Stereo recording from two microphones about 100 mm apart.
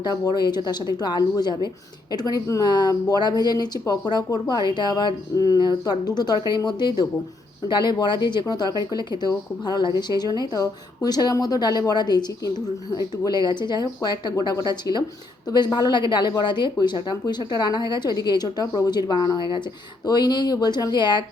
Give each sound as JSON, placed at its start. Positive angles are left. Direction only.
{"t": 0.0, "sound": "speech", "side_deg": 45}
{"t": 13.2, "sound": "speech", "side_deg": 45}